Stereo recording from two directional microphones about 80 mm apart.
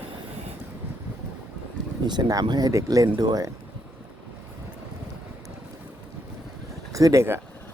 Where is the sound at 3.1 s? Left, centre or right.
Right.